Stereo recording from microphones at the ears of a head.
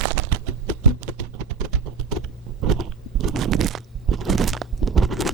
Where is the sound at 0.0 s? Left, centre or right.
Right.